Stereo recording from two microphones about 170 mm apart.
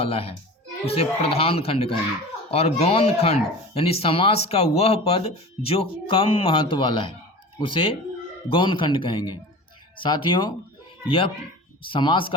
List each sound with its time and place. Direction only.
0.0 s speech: 35° left (ahead or behind)
11.9 s speech: 30° left (ahead or behind)